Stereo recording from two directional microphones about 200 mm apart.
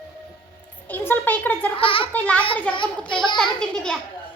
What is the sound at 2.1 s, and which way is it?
A child's voice, 5° left (ahead or behind).